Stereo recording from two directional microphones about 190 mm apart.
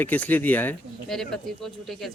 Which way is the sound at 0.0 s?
10° left (ahead or behind).